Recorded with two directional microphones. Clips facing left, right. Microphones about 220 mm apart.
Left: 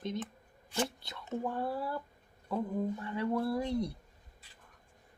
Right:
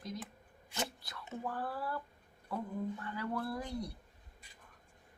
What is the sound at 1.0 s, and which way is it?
Speech, 20° left (ahead or behind).